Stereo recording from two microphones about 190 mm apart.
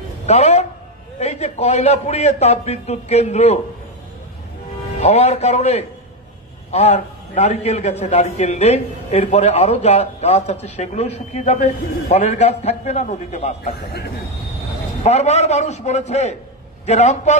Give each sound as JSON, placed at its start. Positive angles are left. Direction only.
{"t": 0.3, "sound": "a man's voice", "side_deg": 35}
{"t": 4.9, "sound": "a man's voice", "side_deg": 35}
{"t": 15.0, "sound": "a man's voice", "side_deg": 35}